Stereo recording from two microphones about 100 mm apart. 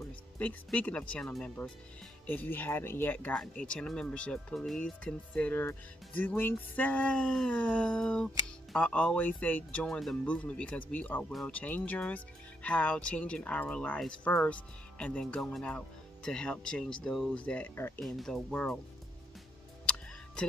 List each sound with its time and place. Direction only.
0.4 s speech: 15° left (ahead or behind)
1.6 s speech: 20° left (ahead or behind)
18.0 s speech: centre (ahead or behind)